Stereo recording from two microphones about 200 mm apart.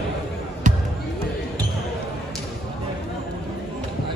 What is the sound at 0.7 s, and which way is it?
Basketball bounce, 40° right (ahead or behind).